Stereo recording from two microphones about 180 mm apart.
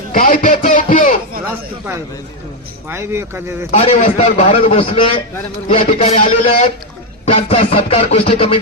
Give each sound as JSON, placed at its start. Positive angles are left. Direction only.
{"t": 0.1, "sound": "a sound", "side_deg": 50}
{"t": 2.9, "sound": "speech", "side_deg": -15}
{"t": 3.7, "sound": "a man's voice", "side_deg": 35}